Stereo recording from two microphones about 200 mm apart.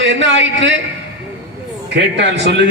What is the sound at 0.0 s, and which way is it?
Speech, 65° right (ahead or behind).